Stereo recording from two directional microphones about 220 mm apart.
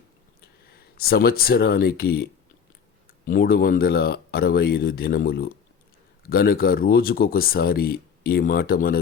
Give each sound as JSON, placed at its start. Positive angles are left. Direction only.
{"t": 0.9, "sound": "speech", "side_deg": 45}
{"t": 3.2, "sound": "speech", "side_deg": 40}